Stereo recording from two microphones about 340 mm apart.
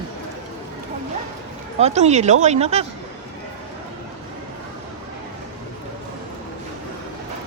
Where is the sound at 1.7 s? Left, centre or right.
Centre.